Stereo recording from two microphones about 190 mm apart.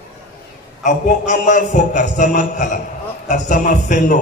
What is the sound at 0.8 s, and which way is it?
A man's voice, 40° left (ahead or behind).